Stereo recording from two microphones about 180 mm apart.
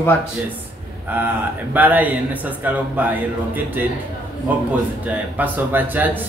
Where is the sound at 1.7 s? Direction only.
10° right (ahead or behind).